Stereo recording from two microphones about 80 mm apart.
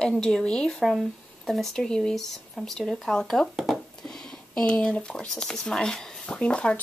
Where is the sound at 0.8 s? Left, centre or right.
Centre.